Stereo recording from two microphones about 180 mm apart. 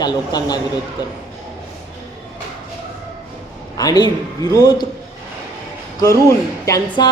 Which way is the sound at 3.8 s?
20° left (ahead or behind).